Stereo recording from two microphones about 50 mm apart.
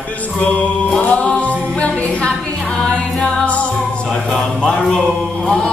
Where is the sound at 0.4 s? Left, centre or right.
Left.